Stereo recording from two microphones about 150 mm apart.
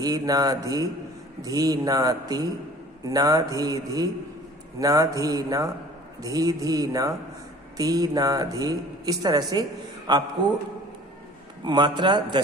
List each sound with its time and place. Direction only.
0.0 s speech: 25° right (ahead or behind)
11.6 s speech: 30° right (ahead or behind)